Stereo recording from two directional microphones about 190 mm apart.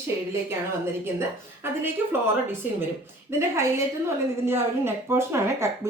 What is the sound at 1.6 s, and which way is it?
Speech, 10° right (ahead or behind).